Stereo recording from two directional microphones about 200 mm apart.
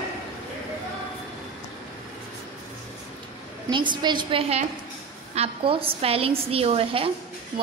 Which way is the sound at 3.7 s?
25° right (ahead or behind).